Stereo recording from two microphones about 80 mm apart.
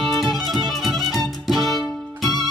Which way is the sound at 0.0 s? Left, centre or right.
Centre.